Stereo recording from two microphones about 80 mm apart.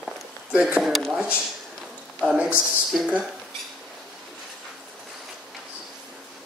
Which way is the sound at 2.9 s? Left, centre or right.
Centre.